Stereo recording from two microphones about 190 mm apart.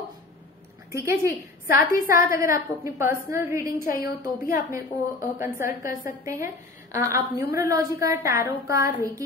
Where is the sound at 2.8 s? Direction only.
15° right (ahead or behind).